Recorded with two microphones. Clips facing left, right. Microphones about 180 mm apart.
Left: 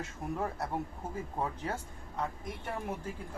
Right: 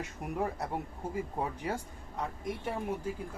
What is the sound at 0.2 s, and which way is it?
Speech, 15° right (ahead or behind).